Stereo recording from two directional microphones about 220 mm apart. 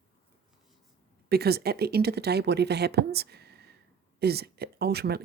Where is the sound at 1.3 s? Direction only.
45° right (ahead or behind).